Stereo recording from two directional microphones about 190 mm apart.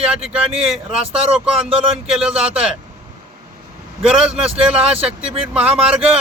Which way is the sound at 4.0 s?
5° right (ahead or behind).